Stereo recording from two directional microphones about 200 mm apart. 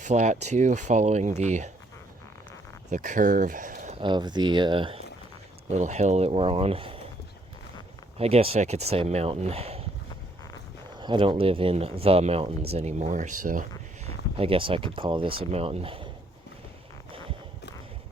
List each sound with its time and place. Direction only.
0.0 s speech: 35° right (ahead or behind)
2.9 s speech: 40° right (ahead or behind)
4.0 s speech: 20° right (ahead or behind)
8.2 s speech: 30° right (ahead or behind)
10.9 s speech: 25° right (ahead or behind); by 14.1 s 40° right (ahead or behind)
14.3 s speech: 25° right (ahead or behind)